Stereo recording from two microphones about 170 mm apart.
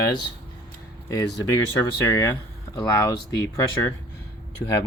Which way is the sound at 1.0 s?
20° left (ahead or behind).